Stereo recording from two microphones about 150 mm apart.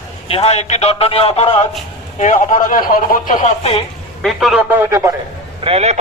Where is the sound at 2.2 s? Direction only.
55° left (ahead or behind).